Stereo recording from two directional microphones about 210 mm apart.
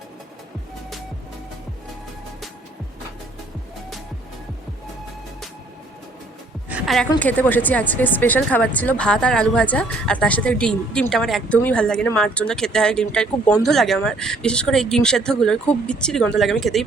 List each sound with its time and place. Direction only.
6.7 s music: 5° right (ahead or behind)
7.2 s speech: 5° left (ahead or behind)